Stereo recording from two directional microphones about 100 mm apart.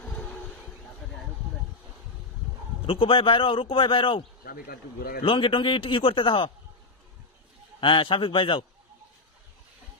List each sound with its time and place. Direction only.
0.0 s a sound: 15° left (ahead or behind)
2.8 s a man's voice: 65° left (ahead or behind)
5.2 s a man's voice: 60° left (ahead or behind)
7.8 s a man's voice: 60° left (ahead or behind)